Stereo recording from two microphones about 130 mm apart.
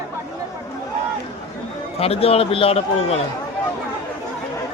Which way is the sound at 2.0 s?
45° left (ahead or behind).